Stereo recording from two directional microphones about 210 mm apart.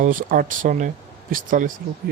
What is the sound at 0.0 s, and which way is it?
Speech, 40° right (ahead or behind).